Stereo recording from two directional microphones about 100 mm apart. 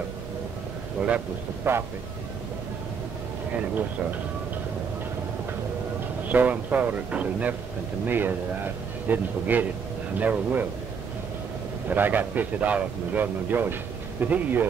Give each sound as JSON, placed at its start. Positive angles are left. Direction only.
{"t": 1.0, "sound": "a man's voice", "side_deg": -10}
{"t": 6.2, "sound": "a man's voice", "side_deg": -15}
{"t": 11.9, "sound": "a man's voice", "side_deg": -20}